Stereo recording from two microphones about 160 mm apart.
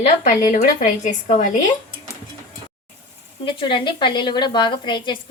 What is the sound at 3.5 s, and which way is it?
A woman's voice, 30° left (ahead or behind).